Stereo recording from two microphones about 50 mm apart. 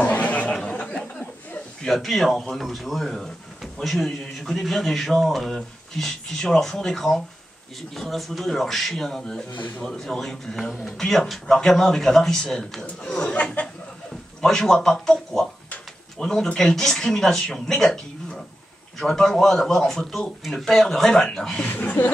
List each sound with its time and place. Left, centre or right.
0.0 s a sound: left
2.0 s a man's voice: centre; by 13.7 s left
14.4 s speech: centre
18.9 s speech: centre
21.6 s speech: left